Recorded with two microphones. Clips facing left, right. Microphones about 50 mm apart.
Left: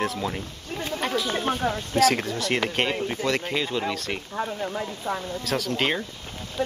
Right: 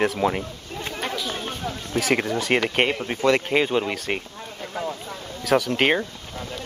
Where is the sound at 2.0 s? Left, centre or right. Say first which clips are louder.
Even; centre.